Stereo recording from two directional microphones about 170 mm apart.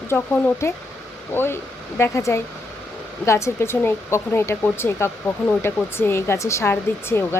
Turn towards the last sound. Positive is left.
turn(degrees=15)  # may be behind; listen again after turning